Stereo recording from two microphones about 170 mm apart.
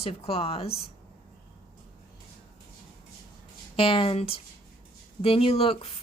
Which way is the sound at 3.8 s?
35° left (ahead or behind).